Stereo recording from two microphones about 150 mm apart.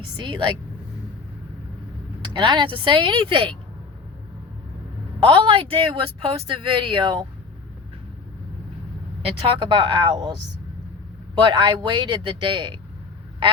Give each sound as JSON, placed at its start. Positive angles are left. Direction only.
{"t": 0.3, "sound": "speech", "side_deg": -30}
{"t": 2.3, "sound": "speech", "side_deg": -30}
{"t": 5.2, "sound": "speech", "side_deg": -35}
{"t": 9.6, "sound": "speech", "side_deg": -30}
{"t": 11.3, "sound": "speech", "side_deg": -30}